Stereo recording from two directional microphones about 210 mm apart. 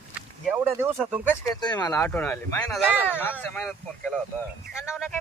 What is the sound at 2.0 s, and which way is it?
Speech, 10° left (ahead or behind).